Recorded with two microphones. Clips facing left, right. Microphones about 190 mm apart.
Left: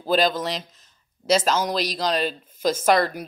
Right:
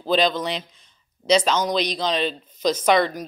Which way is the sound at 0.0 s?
5° left (ahead or behind).